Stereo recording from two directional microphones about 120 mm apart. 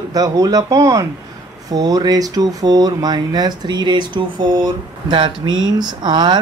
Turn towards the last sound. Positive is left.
turn(degrees=-40)  # may be behind; listen again after turning